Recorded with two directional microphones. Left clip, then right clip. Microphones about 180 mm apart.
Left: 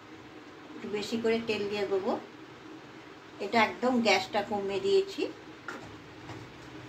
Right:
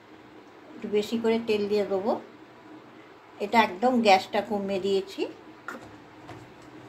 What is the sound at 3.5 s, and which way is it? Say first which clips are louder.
A woman's voice: right 4 dB; 70° right (ahead or behind).